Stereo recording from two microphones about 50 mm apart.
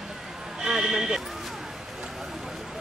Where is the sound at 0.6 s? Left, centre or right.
Centre.